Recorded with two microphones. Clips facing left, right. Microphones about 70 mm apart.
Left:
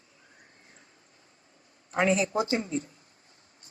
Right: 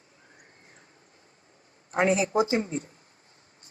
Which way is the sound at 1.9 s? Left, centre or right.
Right.